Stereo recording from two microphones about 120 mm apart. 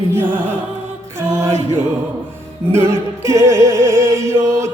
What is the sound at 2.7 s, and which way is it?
Music, 20° right (ahead or behind).